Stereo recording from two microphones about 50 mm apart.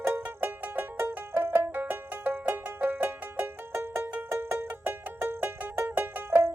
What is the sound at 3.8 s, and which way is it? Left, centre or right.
Music, right.